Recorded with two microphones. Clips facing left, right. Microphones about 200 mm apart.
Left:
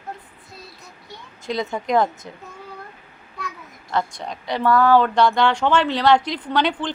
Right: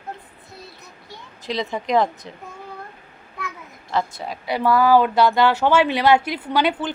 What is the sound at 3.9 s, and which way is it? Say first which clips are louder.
Speech: even; 5° right (ahead or behind).